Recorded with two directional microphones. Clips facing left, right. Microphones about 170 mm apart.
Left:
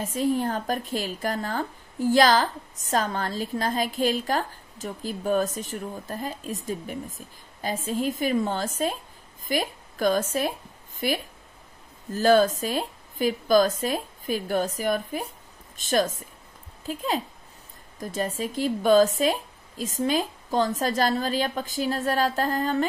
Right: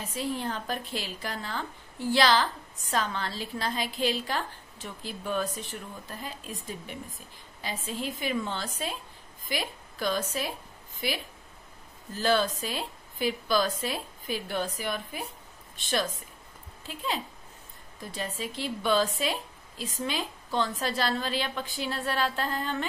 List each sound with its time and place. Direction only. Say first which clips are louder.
0.0 s speech: left 7 dB; 45° left (ahead or behind)